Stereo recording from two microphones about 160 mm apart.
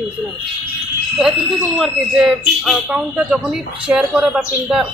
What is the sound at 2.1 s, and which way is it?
Speech, 5° right (ahead or behind).